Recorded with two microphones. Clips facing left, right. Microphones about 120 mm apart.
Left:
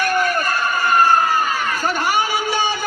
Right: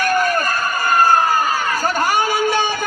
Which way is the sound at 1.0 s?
40° right (ahead or behind).